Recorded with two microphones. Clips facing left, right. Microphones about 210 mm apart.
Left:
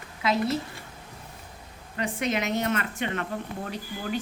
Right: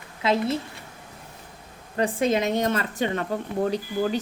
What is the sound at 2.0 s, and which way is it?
Speech, 30° right (ahead or behind).